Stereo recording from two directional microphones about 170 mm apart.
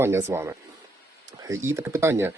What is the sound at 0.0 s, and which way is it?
Speech, 15° right (ahead or behind).